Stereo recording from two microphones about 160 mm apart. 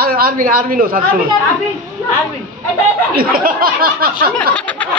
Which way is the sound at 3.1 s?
65° right (ahead or behind).